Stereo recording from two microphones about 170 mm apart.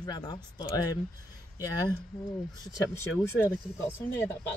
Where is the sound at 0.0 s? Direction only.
25° left (ahead or behind).